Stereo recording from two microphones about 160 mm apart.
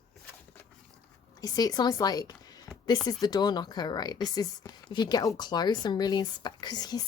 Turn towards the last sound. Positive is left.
turn(degrees=25)  # may be behind; listen again after turning